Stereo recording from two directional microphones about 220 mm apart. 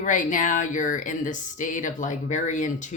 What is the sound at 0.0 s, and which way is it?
Speech, 35° left (ahead or behind).